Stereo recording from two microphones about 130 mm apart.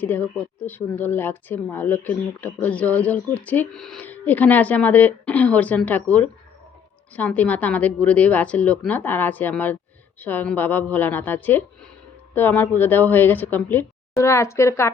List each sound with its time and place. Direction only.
0.0 s a woman's voice: 15° left (ahead or behind)